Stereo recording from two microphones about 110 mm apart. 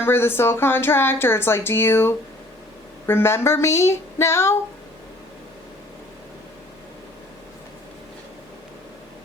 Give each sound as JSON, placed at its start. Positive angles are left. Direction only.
{"t": 0.0, "sound": "a woman's voice", "side_deg": 20}